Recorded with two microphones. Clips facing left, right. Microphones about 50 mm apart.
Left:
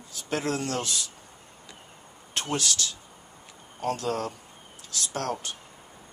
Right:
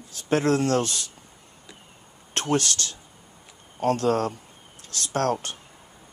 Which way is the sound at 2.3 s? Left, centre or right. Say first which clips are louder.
Right 5 dB; right.